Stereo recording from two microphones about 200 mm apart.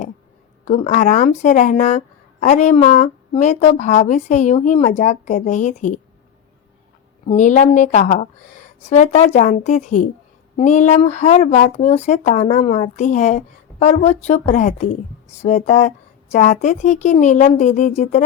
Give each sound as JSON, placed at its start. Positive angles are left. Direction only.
{"t": 0.7, "sound": "speech", "side_deg": 35}
{"t": 7.3, "sound": "speech", "side_deg": 35}